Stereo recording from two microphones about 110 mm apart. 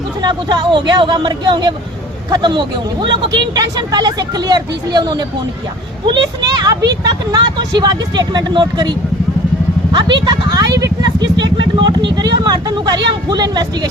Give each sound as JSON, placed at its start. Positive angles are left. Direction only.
{"t": 0.2, "sound": "speech", "side_deg": -40}
{"t": 10.5, "sound": "speech", "side_deg": -30}
{"t": 11.3, "sound": "speech", "side_deg": -45}